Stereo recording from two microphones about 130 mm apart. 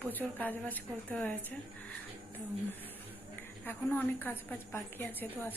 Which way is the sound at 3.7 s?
15° left (ahead or behind).